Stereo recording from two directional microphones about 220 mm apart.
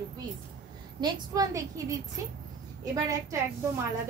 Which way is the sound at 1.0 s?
15° right (ahead or behind).